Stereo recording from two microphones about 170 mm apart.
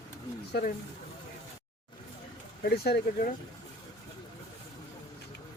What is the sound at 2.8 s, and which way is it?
Speech, 65° left (ahead or behind).